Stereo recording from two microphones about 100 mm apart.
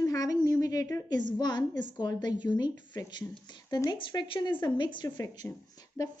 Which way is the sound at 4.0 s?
50° left (ahead or behind).